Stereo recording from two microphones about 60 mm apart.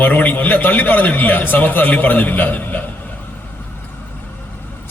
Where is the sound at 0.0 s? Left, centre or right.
Left.